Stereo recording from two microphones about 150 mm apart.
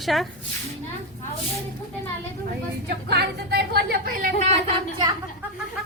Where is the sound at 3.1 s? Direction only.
90° right.